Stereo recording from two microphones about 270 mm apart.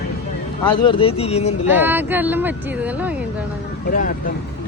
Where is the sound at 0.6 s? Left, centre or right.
Centre.